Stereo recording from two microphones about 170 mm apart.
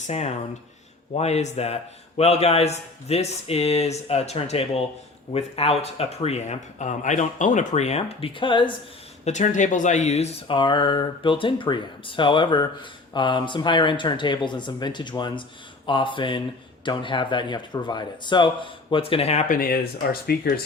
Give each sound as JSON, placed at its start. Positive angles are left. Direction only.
{"t": 0.1, "sound": "a man's voice", "side_deg": 40}
{"t": 9.2, "sound": "speech", "side_deg": 45}